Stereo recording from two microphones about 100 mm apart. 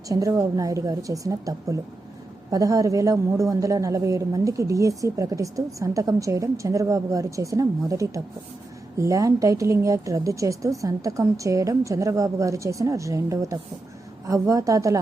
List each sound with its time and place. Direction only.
0.1 s a woman's voice: 35° right (ahead or behind)